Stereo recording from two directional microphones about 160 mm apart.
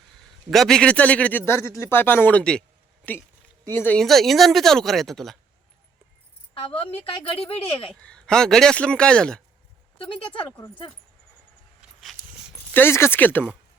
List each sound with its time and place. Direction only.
0.5 s a man's voice: centre (ahead or behind)
3.8 s speech: 5° left (ahead or behind)
6.5 s a woman's voice: 35° left (ahead or behind)
7.9 s speech: 5° left (ahead or behind)
10.0 s a woman's voice: 35° left (ahead or behind)
11.8 s a sound: centre (ahead or behind)
12.7 s a man's voice: 15° left (ahead or behind)